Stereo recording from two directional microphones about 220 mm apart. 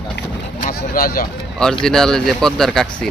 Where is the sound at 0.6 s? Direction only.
40° left (ahead or behind).